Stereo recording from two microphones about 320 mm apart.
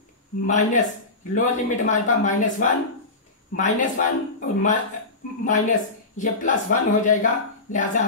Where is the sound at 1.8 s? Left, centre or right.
Left.